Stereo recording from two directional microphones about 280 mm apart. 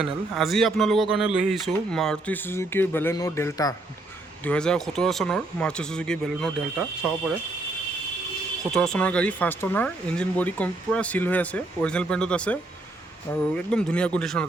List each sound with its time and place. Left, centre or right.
0.0 s speech: centre
8.7 s speech: centre